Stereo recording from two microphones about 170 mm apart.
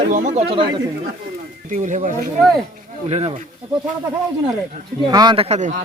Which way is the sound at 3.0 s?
35° right (ahead or behind).